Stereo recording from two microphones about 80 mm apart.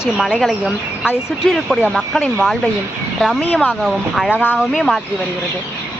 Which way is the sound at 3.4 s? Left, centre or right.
Centre.